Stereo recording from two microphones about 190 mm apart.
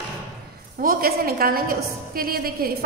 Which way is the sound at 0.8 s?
50° right (ahead or behind).